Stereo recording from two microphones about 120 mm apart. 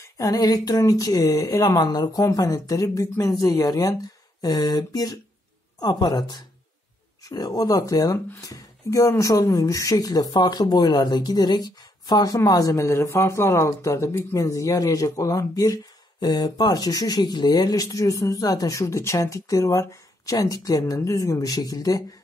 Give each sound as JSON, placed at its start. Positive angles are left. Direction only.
{"t": 0.0, "sound": "speech", "side_deg": 30}